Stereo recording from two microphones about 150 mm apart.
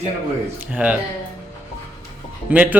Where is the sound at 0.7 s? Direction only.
10° right (ahead or behind).